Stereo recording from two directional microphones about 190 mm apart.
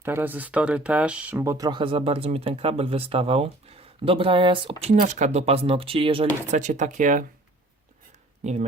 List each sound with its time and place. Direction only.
0.0 s speech: 10° right (ahead or behind); by 4.9 s 30° right (ahead or behind)
4.9 s speech: 40° right (ahead or behind)
6.6 s speech: 40° right (ahead or behind)
8.4 s speech: 35° right (ahead or behind)